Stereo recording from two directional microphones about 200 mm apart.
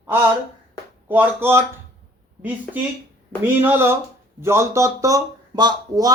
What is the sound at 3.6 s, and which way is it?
Speech, 10° right (ahead or behind).